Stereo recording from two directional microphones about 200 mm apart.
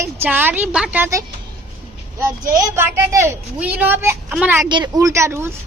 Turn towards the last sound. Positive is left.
turn(degrees=-15)  # may be behind; listen again after turning